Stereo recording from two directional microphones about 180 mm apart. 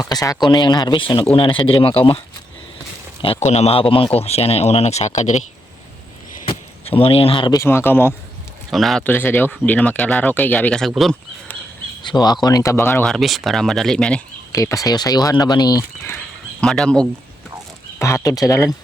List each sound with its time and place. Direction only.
0.0 s speech: 20° left (ahead or behind)
3.4 s speech: 35° left (ahead or behind)
6.8 s speech: 30° left (ahead or behind)
7.6 s speech: 15° left (ahead or behind)
8.7 s speech: centre (ahead or behind)
12.0 s speech: 25° left (ahead or behind); by 14.2 s 5° left (ahead or behind)
14.5 s speech: 20° left (ahead or behind)
18.0 s speech: 20° left (ahead or behind)